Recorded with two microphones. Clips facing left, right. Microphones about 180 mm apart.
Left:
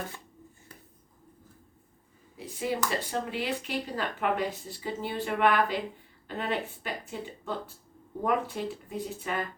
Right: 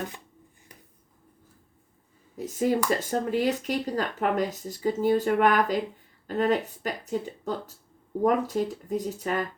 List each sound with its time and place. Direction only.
2.3 s speech: 45° right (ahead or behind)